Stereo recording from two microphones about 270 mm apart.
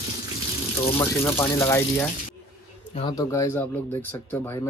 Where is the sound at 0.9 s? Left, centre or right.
Centre.